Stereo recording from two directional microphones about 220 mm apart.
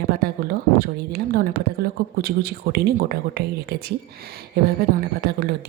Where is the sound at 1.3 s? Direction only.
45° right (ahead or behind).